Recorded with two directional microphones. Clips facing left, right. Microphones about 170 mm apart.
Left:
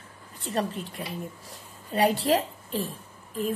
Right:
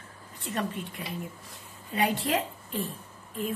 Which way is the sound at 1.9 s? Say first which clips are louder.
Left 4 dB; 35° left (ahead or behind).